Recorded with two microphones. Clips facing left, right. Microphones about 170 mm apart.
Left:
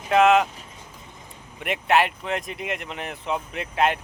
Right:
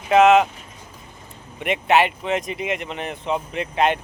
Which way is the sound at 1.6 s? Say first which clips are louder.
Right 3 dB; centre (ahead or behind).